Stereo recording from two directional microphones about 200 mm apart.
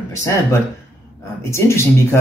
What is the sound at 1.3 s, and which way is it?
Speech, 15° left (ahead or behind).